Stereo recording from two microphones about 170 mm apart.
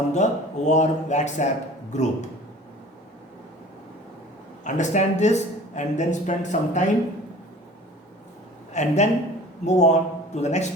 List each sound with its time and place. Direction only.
0.1 s speech: 45° left (ahead or behind)
4.6 s speech: 45° left (ahead or behind)
8.7 s speech: 45° left (ahead or behind)